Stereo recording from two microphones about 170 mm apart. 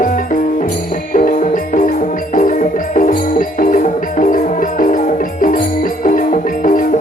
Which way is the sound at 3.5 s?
50° left (ahead or behind).